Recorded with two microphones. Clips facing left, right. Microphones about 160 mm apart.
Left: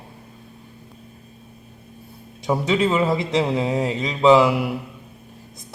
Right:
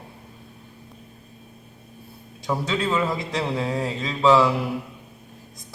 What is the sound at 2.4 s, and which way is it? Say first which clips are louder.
Speech: left 5 dB; 20° left (ahead or behind).